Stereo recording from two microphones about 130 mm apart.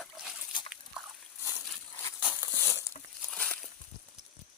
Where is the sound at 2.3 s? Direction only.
20° left (ahead or behind).